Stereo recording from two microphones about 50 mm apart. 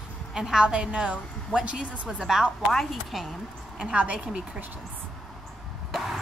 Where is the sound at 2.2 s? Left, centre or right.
Centre.